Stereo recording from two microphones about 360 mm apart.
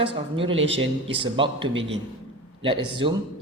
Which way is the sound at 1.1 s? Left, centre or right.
Centre.